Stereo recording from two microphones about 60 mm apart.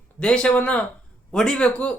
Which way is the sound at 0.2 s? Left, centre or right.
Centre.